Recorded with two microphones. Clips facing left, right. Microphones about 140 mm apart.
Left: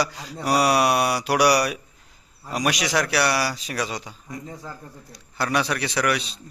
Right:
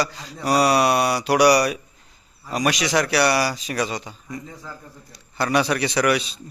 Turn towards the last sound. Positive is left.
turn(degrees=-5)  # may be behind; listen again after turning